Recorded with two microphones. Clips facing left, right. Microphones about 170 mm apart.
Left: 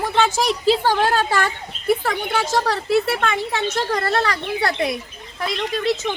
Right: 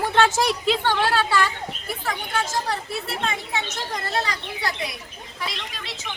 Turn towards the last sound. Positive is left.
turn(degrees=45)  # may be behind; listen again after turning